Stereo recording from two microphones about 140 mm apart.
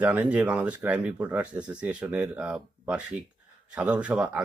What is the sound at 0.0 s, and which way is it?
Speech, 10° right (ahead or behind).